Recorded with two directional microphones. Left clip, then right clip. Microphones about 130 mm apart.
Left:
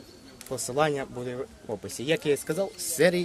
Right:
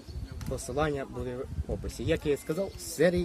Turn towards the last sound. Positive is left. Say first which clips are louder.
# left 3 dB
turn(degrees=-25)  # may be behind; listen again after turning